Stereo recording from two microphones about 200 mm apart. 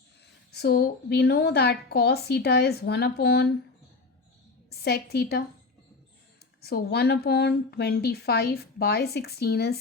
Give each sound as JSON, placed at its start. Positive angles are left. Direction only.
{"t": 0.5, "sound": "a woman's voice", "side_deg": 55}
{"t": 4.7, "sound": "a woman's voice", "side_deg": 50}
{"t": 6.6, "sound": "a woman's voice", "side_deg": 50}